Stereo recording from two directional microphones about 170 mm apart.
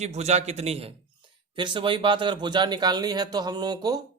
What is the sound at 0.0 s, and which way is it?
A man's voice, 40° right (ahead or behind).